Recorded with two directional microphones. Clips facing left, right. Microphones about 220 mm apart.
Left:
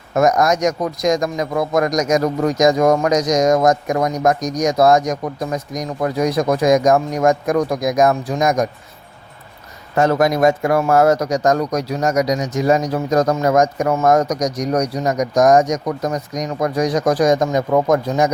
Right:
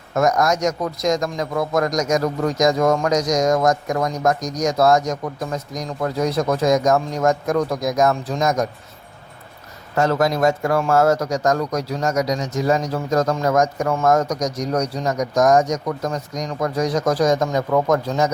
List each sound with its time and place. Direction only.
0.1 s a man's voice: 20° left (ahead or behind)
10.0 s a man's voice: 15° left (ahead or behind)